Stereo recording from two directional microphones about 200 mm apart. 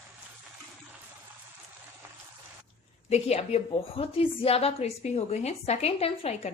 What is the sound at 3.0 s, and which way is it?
A woman's voice, 35° left (ahead or behind).